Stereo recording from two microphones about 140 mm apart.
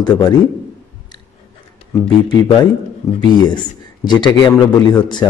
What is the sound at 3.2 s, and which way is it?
Speech, 30° left (ahead or behind).